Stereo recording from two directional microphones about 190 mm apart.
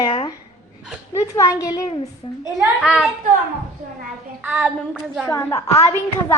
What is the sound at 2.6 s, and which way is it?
Speech, 5° right (ahead or behind).